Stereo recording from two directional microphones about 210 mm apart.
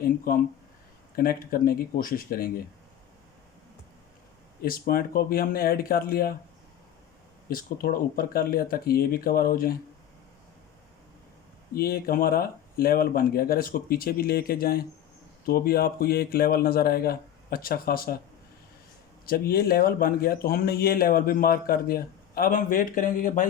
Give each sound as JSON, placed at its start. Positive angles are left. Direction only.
{"t": 0.3, "sound": "speech", "side_deg": 45}
{"t": 4.6, "sound": "speech", "side_deg": 45}
{"t": 7.5, "sound": "speech", "side_deg": 45}
{"t": 11.7, "sound": "speech", "side_deg": 45}
{"t": 19.2, "sound": "speech", "side_deg": 45}